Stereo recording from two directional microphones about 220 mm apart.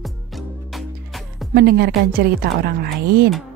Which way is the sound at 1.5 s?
45° right (ahead or behind).